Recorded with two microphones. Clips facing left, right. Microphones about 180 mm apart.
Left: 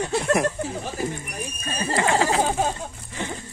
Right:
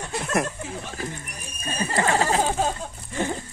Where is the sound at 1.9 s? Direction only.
25° left (ahead or behind).